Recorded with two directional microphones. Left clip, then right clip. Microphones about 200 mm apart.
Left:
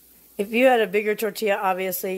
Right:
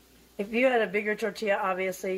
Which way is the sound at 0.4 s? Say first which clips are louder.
Left 6 dB; 55° left (ahead or behind).